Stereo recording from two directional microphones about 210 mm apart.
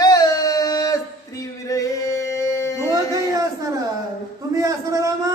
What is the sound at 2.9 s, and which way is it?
A man's voice, 15° right (ahead or behind).